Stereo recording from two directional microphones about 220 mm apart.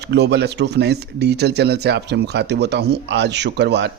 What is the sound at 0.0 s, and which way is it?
Speech, 50° right (ahead or behind).